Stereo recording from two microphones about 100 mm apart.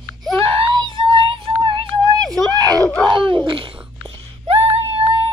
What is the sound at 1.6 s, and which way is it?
Music, 55° right (ahead or behind).